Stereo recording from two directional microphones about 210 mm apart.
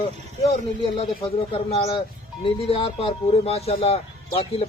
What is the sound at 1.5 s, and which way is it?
Speech, 25° left (ahead or behind).